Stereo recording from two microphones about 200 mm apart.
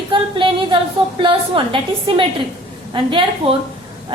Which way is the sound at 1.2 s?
25° right (ahead or behind).